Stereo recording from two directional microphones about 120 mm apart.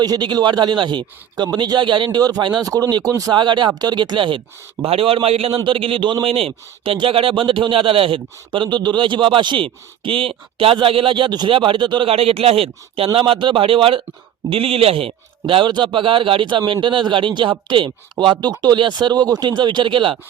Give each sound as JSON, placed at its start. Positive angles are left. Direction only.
{"t": 0.0, "sound": "speech", "side_deg": -35}
{"t": 3.3, "sound": "speech", "side_deg": -40}